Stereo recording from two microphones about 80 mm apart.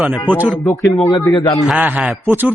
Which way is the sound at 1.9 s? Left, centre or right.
Centre.